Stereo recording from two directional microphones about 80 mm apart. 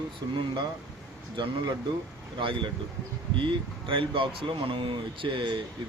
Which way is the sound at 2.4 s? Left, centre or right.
Right.